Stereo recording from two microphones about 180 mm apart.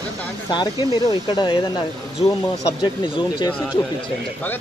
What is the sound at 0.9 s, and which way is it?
Speech, 25° left (ahead or behind).